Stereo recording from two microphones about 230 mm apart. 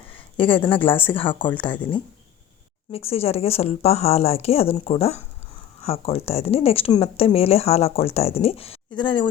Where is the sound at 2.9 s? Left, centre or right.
Left.